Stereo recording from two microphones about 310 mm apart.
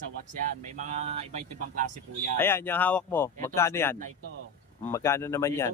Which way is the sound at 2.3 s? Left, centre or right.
Centre.